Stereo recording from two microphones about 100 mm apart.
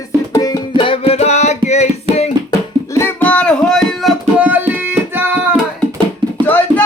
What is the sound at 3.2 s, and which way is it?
Music, 10° left (ahead or behind).